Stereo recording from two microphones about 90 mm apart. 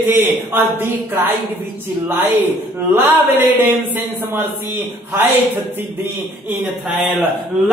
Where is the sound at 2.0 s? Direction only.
25° right (ahead or behind).